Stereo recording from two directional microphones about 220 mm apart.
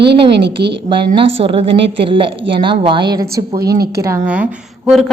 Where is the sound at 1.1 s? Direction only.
25° right (ahead or behind).